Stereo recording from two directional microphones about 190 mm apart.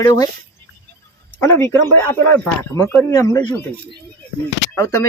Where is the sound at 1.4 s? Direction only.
15° left (ahead or behind).